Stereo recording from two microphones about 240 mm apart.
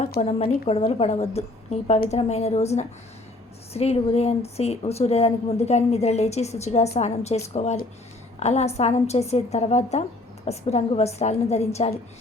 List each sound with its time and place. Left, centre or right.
0.1 s a woman's voice: left